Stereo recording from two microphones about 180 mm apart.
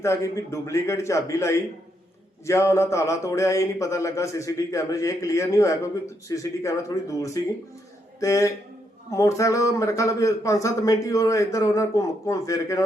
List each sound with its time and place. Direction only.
0.0 s speech: 15° left (ahead or behind)